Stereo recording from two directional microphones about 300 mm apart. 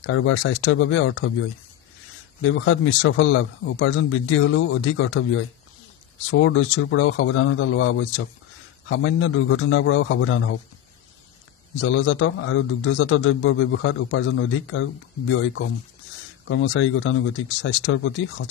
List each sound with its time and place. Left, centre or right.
0.0 s a man's voice: left
2.4 s a man's voice: left
11.8 s a man's voice: left